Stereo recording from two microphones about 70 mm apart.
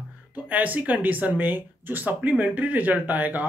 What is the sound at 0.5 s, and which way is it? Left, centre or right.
Speech, right.